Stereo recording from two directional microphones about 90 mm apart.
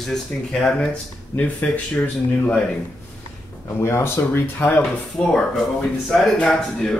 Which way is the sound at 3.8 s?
30° left (ahead or behind).